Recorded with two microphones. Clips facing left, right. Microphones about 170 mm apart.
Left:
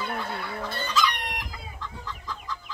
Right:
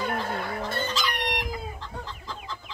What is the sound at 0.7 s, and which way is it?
Chicken, 50° right (ahead or behind).